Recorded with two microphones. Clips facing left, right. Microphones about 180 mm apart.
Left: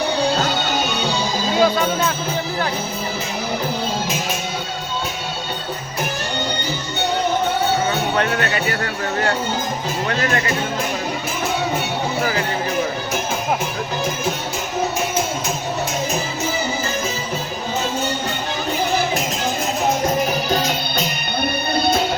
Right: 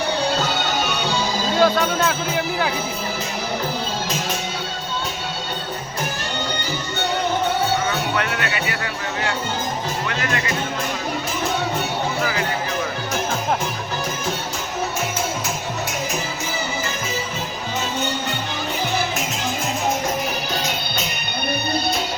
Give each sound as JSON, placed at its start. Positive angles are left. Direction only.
{"t": 1.5, "sound": "speech", "side_deg": 5}
{"t": 8.1, "sound": "speech", "side_deg": 35}
{"t": 12.2, "sound": "speech", "side_deg": 35}